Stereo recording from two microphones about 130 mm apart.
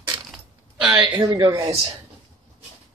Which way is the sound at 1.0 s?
35° right (ahead or behind).